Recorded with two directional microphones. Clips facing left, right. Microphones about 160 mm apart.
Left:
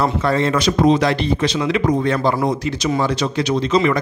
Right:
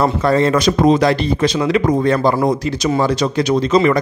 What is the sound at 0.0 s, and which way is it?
Speech, 40° right (ahead or behind).